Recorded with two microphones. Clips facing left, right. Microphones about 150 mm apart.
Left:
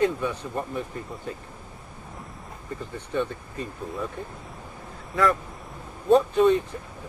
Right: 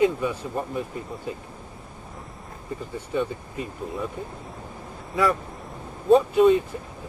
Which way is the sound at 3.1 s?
10° right (ahead or behind).